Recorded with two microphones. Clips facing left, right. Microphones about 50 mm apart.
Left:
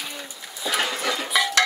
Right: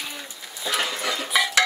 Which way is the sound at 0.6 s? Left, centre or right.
Centre.